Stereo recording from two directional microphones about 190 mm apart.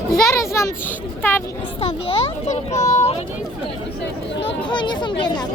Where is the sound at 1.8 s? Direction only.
30° left (ahead or behind).